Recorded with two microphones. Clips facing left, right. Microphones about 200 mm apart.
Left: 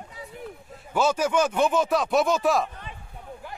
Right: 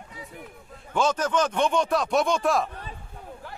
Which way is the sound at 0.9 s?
10° left (ahead or behind).